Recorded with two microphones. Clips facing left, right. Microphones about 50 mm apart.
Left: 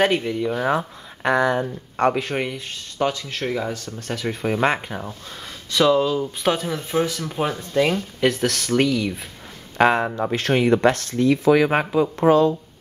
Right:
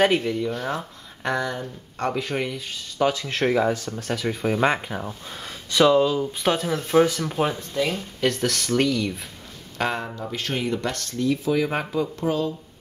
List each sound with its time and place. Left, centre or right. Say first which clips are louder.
0.0 s speech: left 1 dB; centre; by 2.1 s left
2.1 s speech: left 2 dB; centre
3.3 s speech: right 4 dB; centre
3.9 s speech: even; centre
7.0 s speech: right 3 dB; centre
7.9 s speech: left 4 dB; centre
9.8 s speech: left 9 dB; left
10.1 s speech: left 7 dB; left
10.5 s speech: left 10 dB; left
11.8 s speech: left 5 dB; left
12.3 s speech: left 11 dB; left